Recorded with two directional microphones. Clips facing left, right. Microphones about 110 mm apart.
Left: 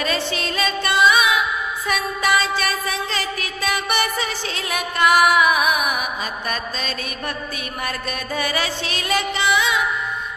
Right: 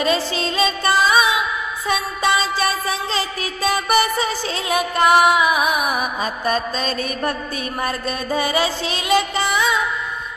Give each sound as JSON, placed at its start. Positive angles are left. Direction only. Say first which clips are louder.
{"t": 0.0, "sound": "music", "louder": "right 4 dB", "side_deg": -30}